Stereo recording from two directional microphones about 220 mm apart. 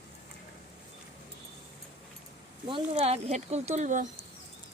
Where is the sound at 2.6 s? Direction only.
25° right (ahead or behind).